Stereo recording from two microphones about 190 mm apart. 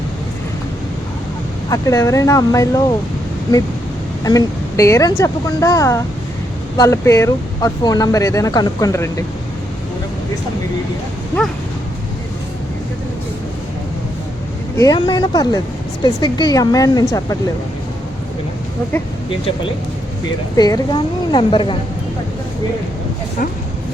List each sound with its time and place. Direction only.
1.7 s speech: 15° left (ahead or behind)
4.2 s speech: 15° left (ahead or behind)
14.8 s a woman's voice: 20° left (ahead or behind)
20.6 s a woman's voice: 20° left (ahead or behind)